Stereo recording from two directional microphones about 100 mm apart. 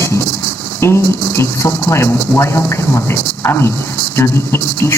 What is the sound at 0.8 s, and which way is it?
Speech, 25° left (ahead or behind).